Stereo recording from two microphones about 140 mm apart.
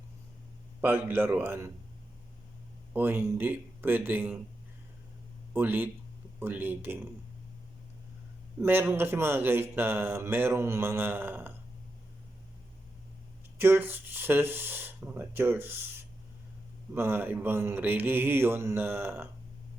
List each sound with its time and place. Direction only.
0.8 s a man's voice: 15° right (ahead or behind)
2.9 s a man's voice: 15° right (ahead or behind)
5.5 s a man's voice: 15° right (ahead or behind)
8.6 s a man's voice: 15° right (ahead or behind)
13.6 s a man's voice: 15° right (ahead or behind)
16.9 s a man's voice: 15° right (ahead or behind)